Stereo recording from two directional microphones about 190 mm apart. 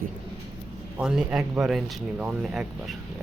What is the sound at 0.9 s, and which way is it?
Speech, 5° right (ahead or behind).